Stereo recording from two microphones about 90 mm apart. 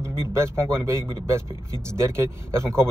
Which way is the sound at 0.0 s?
30° right (ahead or behind).